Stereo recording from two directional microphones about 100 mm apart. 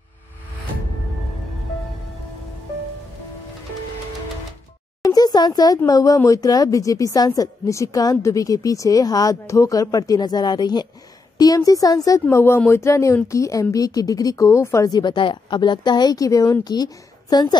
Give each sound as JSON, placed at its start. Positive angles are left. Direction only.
{"t": 5.0, "sound": "a sound", "side_deg": 40}
{"t": 5.9, "sound": "a woman's voice", "side_deg": 35}
{"t": 14.9, "sound": "a woman's voice", "side_deg": 45}